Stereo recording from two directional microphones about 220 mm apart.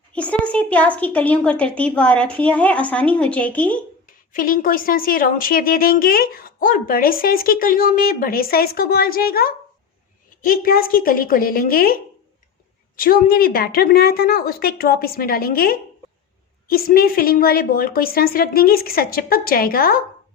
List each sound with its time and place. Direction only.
0.1 s a woman's voice: 5° left (ahead or behind)
4.3 s speech: 40° left (ahead or behind)
13.0 s a woman's voice: 40° left (ahead or behind)